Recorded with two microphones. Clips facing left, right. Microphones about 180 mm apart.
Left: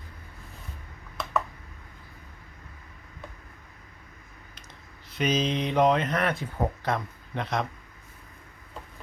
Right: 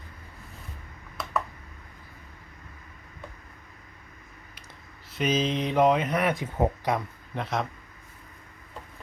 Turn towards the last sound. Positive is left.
turn(degrees=-5)  # may be behind; listen again after turning